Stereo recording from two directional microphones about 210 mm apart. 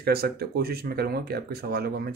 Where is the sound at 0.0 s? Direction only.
45° right (ahead or behind).